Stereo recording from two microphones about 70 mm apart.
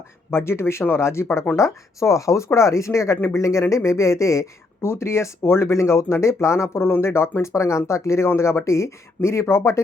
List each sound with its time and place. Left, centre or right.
0.3 s speech: left